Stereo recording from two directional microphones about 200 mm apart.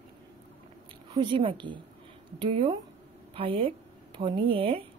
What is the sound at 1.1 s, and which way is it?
Speech, 25° right (ahead or behind).